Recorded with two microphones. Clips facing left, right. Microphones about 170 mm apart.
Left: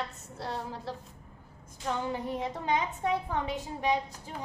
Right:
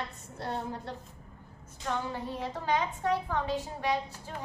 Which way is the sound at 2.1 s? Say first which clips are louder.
Left 3 dB; 20° left (ahead or behind).